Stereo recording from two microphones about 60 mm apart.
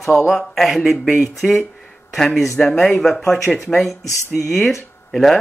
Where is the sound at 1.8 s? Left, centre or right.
Centre.